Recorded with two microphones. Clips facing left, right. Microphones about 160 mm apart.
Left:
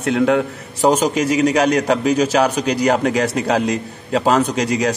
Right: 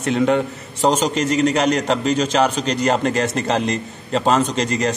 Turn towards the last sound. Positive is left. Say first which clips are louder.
# left 2 dB
turn(degrees=5)  # may be behind; listen again after turning